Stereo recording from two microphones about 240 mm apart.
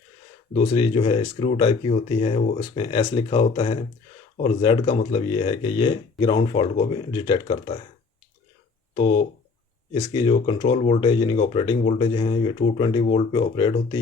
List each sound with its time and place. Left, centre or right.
0.5 s speech: centre
9.0 s speech: left